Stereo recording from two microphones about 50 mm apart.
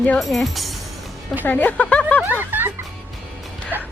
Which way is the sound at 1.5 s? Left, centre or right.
Left.